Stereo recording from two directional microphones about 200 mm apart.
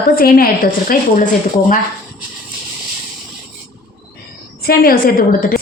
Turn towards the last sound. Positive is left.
turn(degrees=45)  # may be behind; listen again after turning